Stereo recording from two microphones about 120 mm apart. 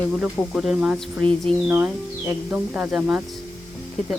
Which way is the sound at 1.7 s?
15° right (ahead or behind).